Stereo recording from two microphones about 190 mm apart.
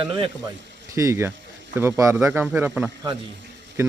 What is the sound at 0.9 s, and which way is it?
A man's voice, 15° right (ahead or behind).